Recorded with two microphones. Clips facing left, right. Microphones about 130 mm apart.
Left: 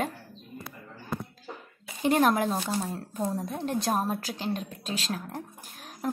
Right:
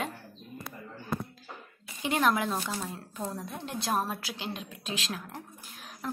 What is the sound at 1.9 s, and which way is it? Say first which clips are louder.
A woman's voice: left 4 dB; 45° left (ahead or behind).